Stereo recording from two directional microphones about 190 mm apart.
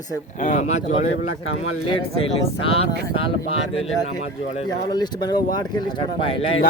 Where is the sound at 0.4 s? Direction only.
35° left (ahead or behind).